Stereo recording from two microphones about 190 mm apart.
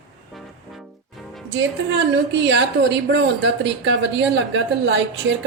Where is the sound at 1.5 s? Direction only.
70° right (ahead or behind).